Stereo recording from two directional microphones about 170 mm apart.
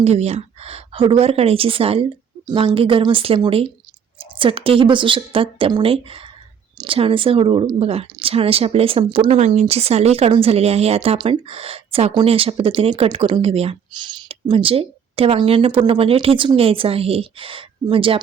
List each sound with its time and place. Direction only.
0.0 s speech: 40° right (ahead or behind)